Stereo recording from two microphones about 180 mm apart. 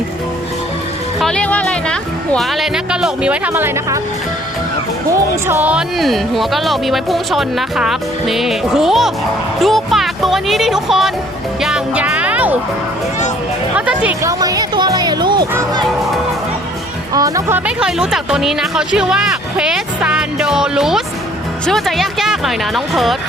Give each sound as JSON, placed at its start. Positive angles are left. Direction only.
{"t": 1.2, "sound": "speech", "side_deg": 5}
{"t": 5.5, "sound": "speech", "side_deg": -10}
{"t": 11.6, "sound": "music", "side_deg": -5}
{"t": 13.7, "sound": "speech", "side_deg": -5}
{"t": 14.4, "sound": "speech", "side_deg": -20}
{"t": 17.2, "sound": "speech", "side_deg": -20}
{"t": 17.7, "sound": "speech", "side_deg": -5}